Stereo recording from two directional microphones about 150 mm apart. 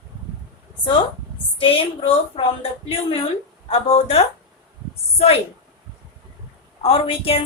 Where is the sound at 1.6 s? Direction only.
35° left (ahead or behind).